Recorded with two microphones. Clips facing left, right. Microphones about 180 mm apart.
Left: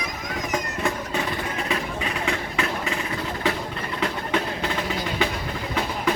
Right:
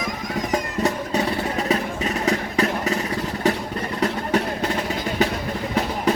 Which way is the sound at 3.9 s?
40° right (ahead or behind).